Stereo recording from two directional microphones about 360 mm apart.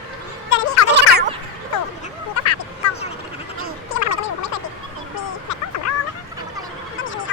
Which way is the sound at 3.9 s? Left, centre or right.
Left.